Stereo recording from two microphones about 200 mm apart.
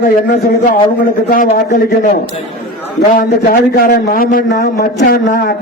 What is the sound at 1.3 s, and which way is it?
Speech, 40° left (ahead or behind).